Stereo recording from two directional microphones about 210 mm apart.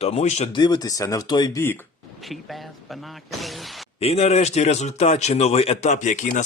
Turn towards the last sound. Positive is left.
turn(degrees=35)  # may be behind; listen again after turning